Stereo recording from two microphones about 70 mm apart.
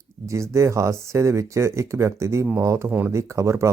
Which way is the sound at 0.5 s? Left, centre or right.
Right.